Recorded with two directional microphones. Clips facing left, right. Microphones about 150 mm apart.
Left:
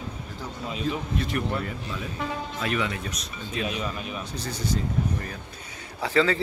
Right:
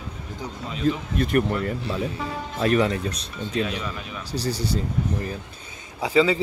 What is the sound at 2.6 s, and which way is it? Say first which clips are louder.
Speech: right 9 dB; 40° right (ahead or behind).